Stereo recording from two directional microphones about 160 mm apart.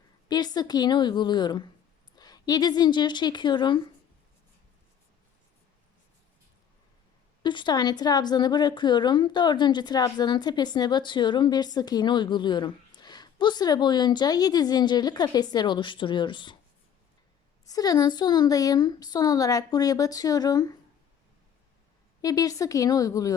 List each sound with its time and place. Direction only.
0.3 s a woman's voice: 25° left (ahead or behind)
7.4 s a woman's voice: 30° left (ahead or behind)
17.7 s a woman's voice: 25° left (ahead or behind)
22.2 s a woman's voice: 20° left (ahead or behind)